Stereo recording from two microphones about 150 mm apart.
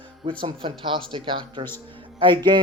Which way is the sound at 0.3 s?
35° right (ahead or behind).